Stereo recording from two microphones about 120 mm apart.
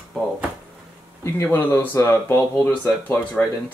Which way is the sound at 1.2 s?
20° left (ahead or behind).